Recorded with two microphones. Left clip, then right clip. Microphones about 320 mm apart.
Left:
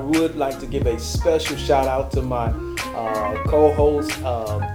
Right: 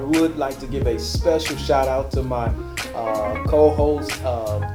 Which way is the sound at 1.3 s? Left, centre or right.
Left.